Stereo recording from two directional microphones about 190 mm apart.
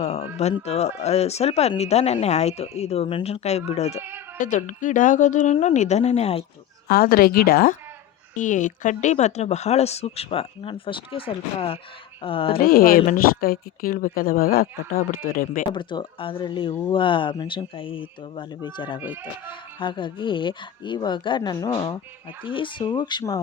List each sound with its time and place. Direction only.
0.0 s speech: 35° left (ahead or behind)
6.8 s speech: 50° left (ahead or behind)
8.4 s speech: 40° left (ahead or behind)
12.5 s speech: 50° left (ahead or behind)
15.7 s speech: 25° left (ahead or behind)
19.0 s speech: 10° right (ahead or behind)
19.8 s speech: 25° left (ahead or behind)